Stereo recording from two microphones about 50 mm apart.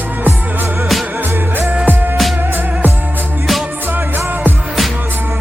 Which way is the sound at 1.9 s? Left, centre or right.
Right.